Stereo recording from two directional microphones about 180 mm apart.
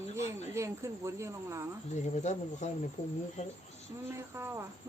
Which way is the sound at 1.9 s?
40° left (ahead or behind).